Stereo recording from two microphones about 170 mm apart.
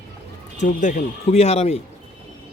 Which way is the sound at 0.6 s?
50° left (ahead or behind).